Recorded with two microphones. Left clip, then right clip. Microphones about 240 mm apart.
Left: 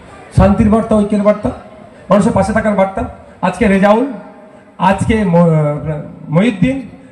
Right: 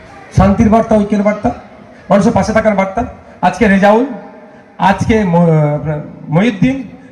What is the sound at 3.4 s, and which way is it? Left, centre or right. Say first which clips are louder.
A man's voice: right 2 dB; right.